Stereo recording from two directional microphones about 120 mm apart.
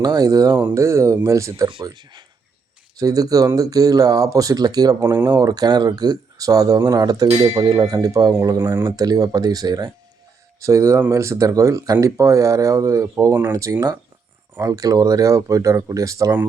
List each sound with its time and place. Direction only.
0.0 s speech: 30° right (ahead or behind)
7.3 s speech: 65° right (ahead or behind)
7.6 s speech: 30° right (ahead or behind)